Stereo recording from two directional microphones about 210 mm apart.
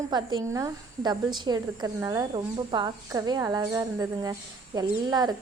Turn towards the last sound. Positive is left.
turn(degrees=-20)  # may be behind; listen again after turning